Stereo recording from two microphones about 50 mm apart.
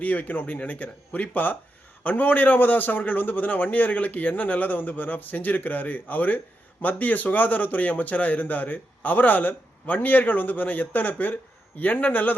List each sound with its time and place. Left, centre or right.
0.0 s a man's voice: left